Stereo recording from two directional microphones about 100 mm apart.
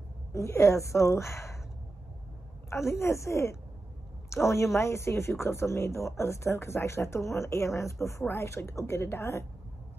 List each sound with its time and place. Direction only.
0.3 s speech: 30° left (ahead or behind)
2.7 s a woman's voice: 25° left (ahead or behind)